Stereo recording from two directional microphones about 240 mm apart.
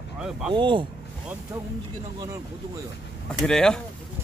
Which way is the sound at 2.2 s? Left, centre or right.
Centre.